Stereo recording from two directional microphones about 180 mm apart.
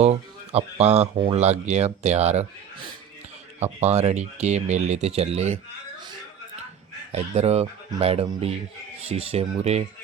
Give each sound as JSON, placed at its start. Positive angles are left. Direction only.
{"t": 0.0, "sound": "speech", "side_deg": -35}
{"t": 3.6, "sound": "speech", "side_deg": -35}
{"t": 7.1, "sound": "speech", "side_deg": -35}